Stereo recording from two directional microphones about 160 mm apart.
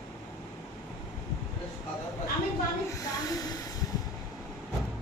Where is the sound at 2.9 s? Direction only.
20° left (ahead or behind).